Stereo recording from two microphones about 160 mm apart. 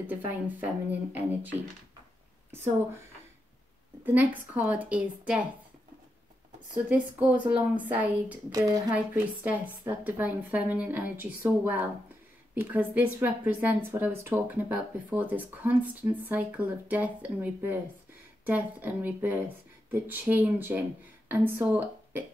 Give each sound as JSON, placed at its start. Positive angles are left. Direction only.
{"t": 0.8, "sound": "speech", "side_deg": -10}
{"t": 4.0, "sound": "speech", "side_deg": -10}
{"t": 6.9, "sound": "speech", "side_deg": -10}
{"t": 8.5, "sound": "a woman's voice", "side_deg": -20}
{"t": 8.9, "sound": "speech", "side_deg": -10}